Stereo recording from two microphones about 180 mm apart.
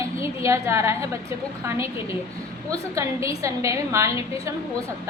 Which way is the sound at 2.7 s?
20° right (ahead or behind).